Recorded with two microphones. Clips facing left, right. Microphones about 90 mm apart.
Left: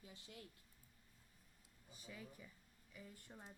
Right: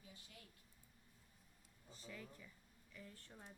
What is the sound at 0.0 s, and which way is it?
Speech, 30° left (ahead or behind).